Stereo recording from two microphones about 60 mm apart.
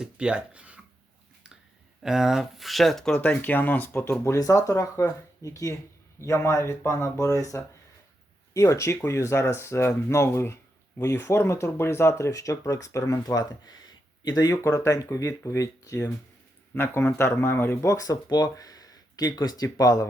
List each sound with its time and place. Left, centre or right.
0.0 s speech: centre
2.0 s speech: centre
3.2 s speech: left
4.0 s speech: left
4.4 s speech: left
6.1 s speech: left
12.3 s speech: left
14.6 s speech: left
16.7 s speech: left
17.8 s speech: left